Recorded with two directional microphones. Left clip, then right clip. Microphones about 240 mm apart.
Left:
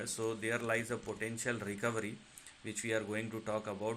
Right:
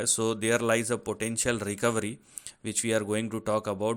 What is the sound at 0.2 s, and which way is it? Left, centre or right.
Speech, right.